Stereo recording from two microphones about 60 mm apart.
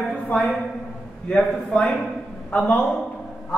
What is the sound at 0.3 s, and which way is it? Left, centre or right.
Speech, left.